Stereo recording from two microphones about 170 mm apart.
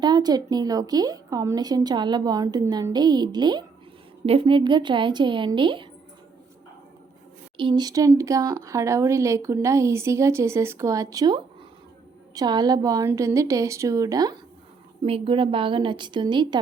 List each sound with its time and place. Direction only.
0.0 s a woman's voice: 25° right (ahead or behind)
7.5 s a woman's voice: 30° right (ahead or behind)
15.0 s a woman's voice: 35° right (ahead or behind)